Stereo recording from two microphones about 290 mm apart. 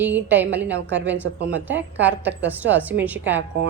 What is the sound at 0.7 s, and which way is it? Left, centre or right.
Speech, right.